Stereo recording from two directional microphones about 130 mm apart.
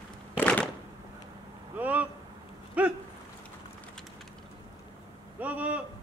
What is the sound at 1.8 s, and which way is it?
Vehicle, 10° right (ahead or behind).